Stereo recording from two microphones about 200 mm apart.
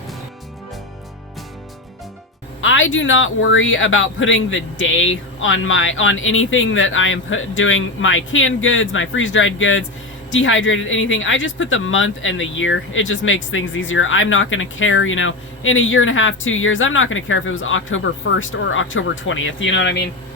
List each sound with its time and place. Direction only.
2.6 s speech: 75° left (ahead or behind)